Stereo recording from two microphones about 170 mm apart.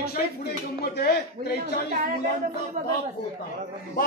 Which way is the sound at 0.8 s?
70° left (ahead or behind).